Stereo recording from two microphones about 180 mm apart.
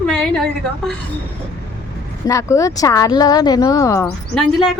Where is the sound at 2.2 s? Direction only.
15° left (ahead or behind).